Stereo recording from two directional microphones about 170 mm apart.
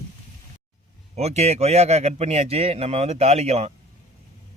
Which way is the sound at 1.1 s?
40° right (ahead or behind).